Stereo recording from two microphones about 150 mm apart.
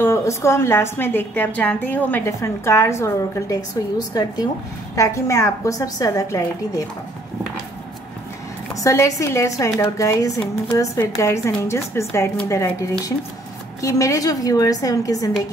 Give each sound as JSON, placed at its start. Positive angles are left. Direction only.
{"t": 0.0, "sound": "a woman's voice", "side_deg": 20}
{"t": 8.8, "sound": "speech", "side_deg": 20}